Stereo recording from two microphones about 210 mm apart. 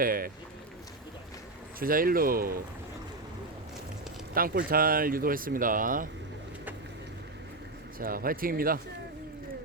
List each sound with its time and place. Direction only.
0.0 s speech: 45° right (ahead or behind)
1.8 s speech: 45° right (ahead or behind)
4.4 s speech: 45° right (ahead or behind)
7.9 s speech: 40° right (ahead or behind)